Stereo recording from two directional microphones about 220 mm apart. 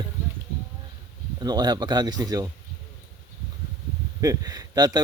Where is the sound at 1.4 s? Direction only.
20° right (ahead or behind).